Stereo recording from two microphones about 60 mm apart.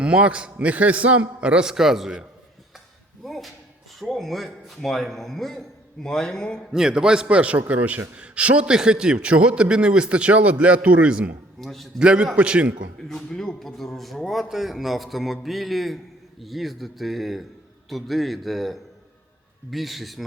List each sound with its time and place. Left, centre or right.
0.0 s a man's voice: centre
3.2 s a sound: centre
4.0 s a man's voice: centre
6.7 s a man's voice: centre
11.6 s a man's voice: centre
11.9 s a man's voice: centre
13.0 s a man's voice: centre